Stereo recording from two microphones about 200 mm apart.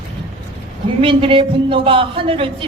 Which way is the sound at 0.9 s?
25° right (ahead or behind).